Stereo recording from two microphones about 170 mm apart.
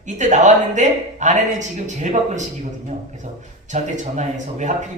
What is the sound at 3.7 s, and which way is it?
Speech, 45° right (ahead or behind).